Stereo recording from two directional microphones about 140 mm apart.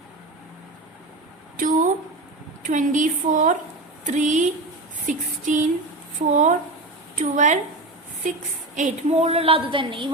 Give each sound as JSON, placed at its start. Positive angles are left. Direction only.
{"t": 2.6, "sound": "a woman's voice", "side_deg": -65}